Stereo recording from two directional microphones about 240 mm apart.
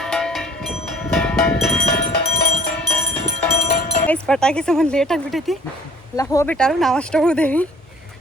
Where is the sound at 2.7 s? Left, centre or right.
Centre.